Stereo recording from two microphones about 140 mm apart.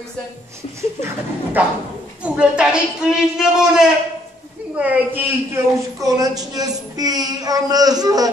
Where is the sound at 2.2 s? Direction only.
5° right (ahead or behind); by 8.3 s 25° right (ahead or behind).